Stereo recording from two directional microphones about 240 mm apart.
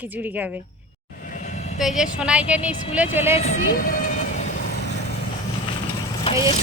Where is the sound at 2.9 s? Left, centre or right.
Centre.